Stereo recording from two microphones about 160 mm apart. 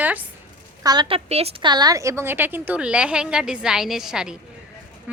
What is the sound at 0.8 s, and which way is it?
Speech, 25° right (ahead or behind).